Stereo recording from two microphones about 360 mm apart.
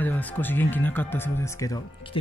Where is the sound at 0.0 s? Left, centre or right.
Centre.